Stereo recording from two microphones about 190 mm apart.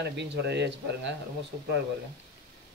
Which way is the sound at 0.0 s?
60° right (ahead or behind).